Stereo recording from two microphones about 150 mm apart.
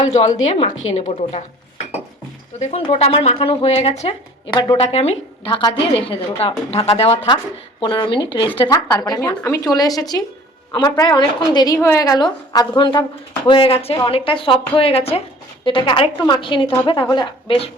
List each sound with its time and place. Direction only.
0.1 s a woman's voice: 50° left (ahead or behind)
2.6 s a woman's voice: 50° left (ahead or behind)
2.8 s a woman's voice: 35° left (ahead or behind)
4.5 s a woman's voice: 30° left (ahead or behind)
4.9 s a woman's voice: 45° left (ahead or behind)